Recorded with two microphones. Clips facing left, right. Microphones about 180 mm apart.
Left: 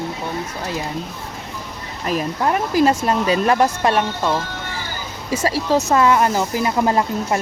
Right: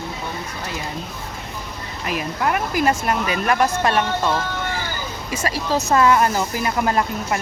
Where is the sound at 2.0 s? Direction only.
40° left (ahead or behind); by 4.4 s 15° left (ahead or behind).